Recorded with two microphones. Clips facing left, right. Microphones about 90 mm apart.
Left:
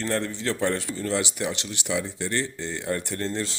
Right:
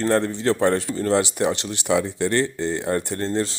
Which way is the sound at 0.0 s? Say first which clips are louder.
Right 7 dB; 40° right (ahead or behind).